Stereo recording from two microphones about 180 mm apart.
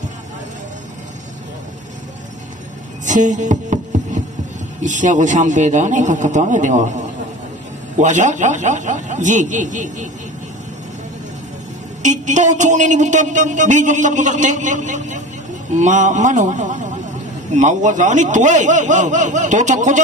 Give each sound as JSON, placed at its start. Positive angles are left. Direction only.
{"t": 3.1, "sound": "music", "side_deg": -45}
{"t": 4.8, "sound": "speech", "side_deg": -45}
{"t": 8.0, "sound": "speech", "side_deg": -45}
{"t": 12.0, "sound": "speech", "side_deg": -40}